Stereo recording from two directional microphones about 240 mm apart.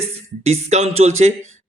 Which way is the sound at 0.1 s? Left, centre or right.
Right.